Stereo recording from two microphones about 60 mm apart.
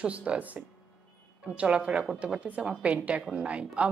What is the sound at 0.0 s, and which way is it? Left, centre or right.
Speech, right.